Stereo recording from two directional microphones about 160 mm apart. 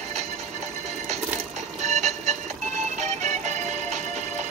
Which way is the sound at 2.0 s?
45° right (ahead or behind).